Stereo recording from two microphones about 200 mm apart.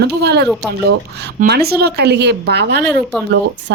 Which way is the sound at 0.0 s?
55° right (ahead or behind).